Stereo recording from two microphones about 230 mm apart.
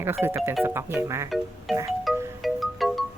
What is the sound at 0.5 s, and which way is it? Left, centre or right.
Speech, centre.